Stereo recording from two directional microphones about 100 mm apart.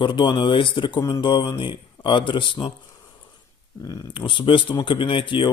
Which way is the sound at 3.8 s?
35° left (ahead or behind).